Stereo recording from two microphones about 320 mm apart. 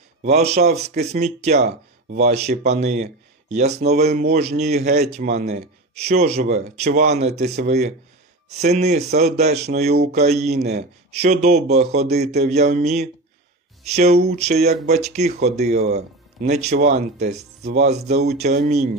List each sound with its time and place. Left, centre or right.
0.2 s speech: right